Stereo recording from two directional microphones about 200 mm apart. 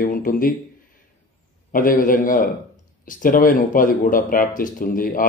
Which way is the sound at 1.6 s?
45° left (ahead or behind).